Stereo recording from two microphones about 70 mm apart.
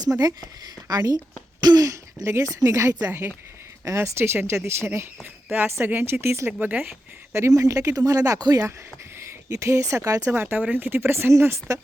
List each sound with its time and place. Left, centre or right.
0.9 s speech: right
2.2 s speech: right
3.0 s speech: right
3.8 s speech: right
6.2 s speech: right
6.6 s speech: right
7.3 s speech: right
9.5 s speech: right
10.4 s speech: right